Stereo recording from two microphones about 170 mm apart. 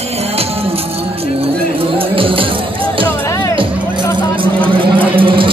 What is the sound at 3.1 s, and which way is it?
Music, 20° left (ahead or behind).